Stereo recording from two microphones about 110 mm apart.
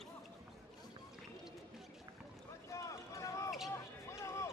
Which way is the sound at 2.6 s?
30° left (ahead or behind).